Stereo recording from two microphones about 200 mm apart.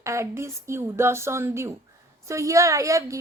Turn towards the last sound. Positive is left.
turn(degrees=-15)  # may be behind; listen again after turning